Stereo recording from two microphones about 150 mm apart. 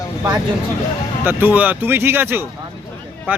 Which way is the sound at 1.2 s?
10° right (ahead or behind).